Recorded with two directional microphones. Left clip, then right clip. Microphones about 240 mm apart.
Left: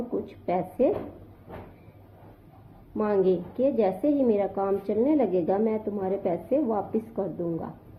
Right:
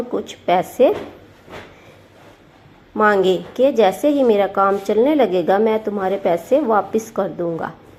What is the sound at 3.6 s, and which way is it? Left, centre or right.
A woman's voice, right.